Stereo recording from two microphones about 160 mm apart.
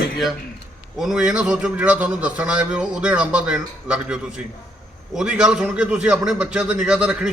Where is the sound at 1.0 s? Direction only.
5° right (ahead or behind).